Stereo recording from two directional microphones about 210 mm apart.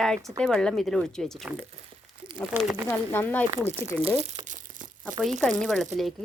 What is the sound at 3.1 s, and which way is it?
Speech, 10° left (ahead or behind).